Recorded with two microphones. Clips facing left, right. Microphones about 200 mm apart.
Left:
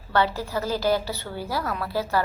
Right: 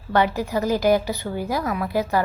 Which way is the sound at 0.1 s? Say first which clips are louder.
Right 3 dB; 15° right (ahead or behind).